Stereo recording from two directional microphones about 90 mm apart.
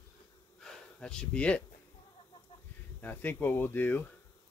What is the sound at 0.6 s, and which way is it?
Speech, 10° left (ahead or behind).